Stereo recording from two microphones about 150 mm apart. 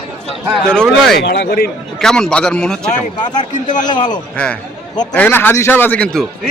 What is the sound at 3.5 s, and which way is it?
Speech, 55° left (ahead or behind).